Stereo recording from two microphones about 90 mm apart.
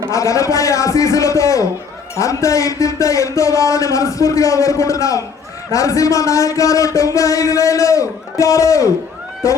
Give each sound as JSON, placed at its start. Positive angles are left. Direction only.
{"t": 0.1, "sound": "speech", "side_deg": 35}